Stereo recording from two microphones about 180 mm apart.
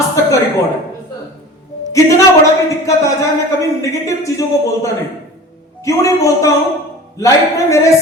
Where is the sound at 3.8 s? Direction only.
15° left (ahead or behind).